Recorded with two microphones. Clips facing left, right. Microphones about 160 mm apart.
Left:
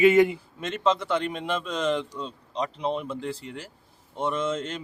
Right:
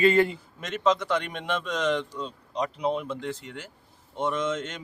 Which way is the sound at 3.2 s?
35° left (ahead or behind).